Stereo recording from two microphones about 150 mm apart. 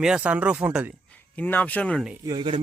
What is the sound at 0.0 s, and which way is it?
Speech, 5° right (ahead or behind).